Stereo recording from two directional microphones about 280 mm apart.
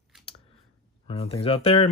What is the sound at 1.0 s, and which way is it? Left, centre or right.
Speech, left.